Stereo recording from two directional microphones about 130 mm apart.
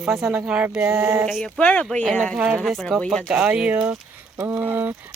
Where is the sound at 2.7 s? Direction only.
Centre (ahead or behind).